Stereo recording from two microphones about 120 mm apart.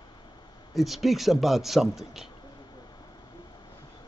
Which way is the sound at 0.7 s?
Centre (ahead or behind).